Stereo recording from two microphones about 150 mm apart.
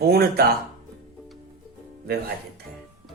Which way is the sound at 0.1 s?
90° right.